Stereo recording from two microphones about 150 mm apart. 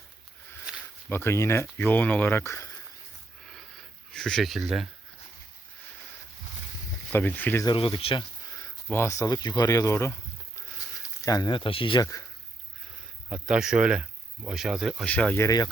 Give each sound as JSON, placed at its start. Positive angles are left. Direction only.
{"t": 1.1, "sound": "speech", "side_deg": 15}
{"t": 3.4, "sound": "a sound", "side_deg": 0}
{"t": 4.1, "sound": "speech", "side_deg": 5}
{"t": 7.1, "sound": "speech", "side_deg": 15}
{"t": 7.6, "sound": "speech", "side_deg": 35}
{"t": 8.5, "sound": "speech", "side_deg": 15}
{"t": 13.3, "sound": "speech", "side_deg": -5}
{"t": 15.0, "sound": "speech", "side_deg": 10}
{"t": 15.4, "sound": "speech", "side_deg": 25}